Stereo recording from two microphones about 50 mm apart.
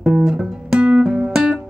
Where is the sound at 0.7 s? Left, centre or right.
Right.